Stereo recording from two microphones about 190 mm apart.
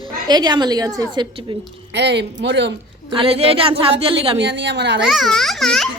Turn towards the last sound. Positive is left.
turn(degrees=0)  # may be behind; listen again after turning